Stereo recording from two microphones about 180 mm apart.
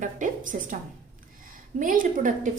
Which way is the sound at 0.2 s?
45° right (ahead or behind).